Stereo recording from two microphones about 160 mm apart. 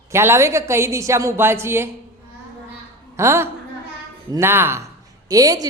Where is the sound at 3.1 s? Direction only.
15° right (ahead or behind).